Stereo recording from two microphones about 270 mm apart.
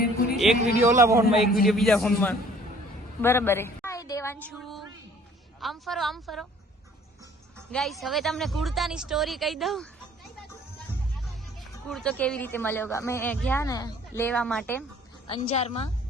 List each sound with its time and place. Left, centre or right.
0.0 s music: left
0.9 s a man's voice: centre
1.5 s a woman's voice: centre
7.7 s speech: centre
11.3 s speech: centre
15.3 s a woman's voice: left